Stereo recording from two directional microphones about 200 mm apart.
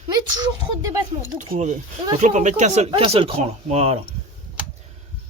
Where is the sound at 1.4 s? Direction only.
35° right (ahead or behind).